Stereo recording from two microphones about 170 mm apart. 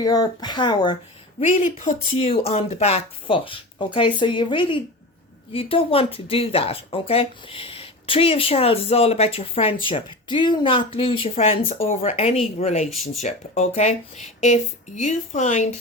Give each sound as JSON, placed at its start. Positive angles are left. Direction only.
{"t": 0.0, "sound": "speech", "side_deg": 25}
{"t": 1.4, "sound": "speech", "side_deg": 45}
{"t": 12.9, "sound": "speech", "side_deg": 0}
{"t": 13.2, "sound": "speech", "side_deg": 45}